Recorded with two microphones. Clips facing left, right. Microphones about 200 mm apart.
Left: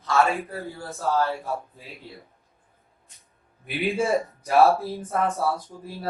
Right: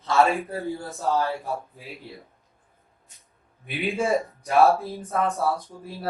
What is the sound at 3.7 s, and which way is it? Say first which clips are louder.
Speech: left 1 dB; centre (ahead or behind).